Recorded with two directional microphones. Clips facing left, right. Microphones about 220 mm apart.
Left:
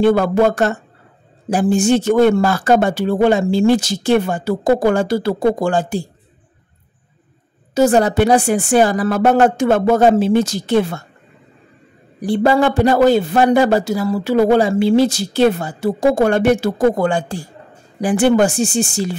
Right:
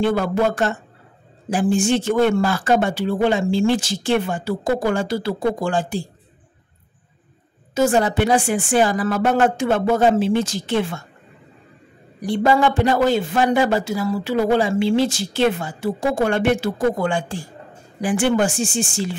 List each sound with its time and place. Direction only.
0.0 s speech: 45° left (ahead or behind)
7.7 s a man's voice: 40° left (ahead or behind)
12.2 s a man's voice: 35° left (ahead or behind)